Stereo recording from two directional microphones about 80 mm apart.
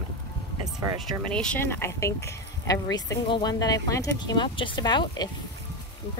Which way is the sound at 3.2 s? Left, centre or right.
Left.